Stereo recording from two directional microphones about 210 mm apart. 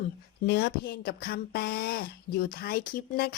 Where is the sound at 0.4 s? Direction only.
50° left (ahead or behind).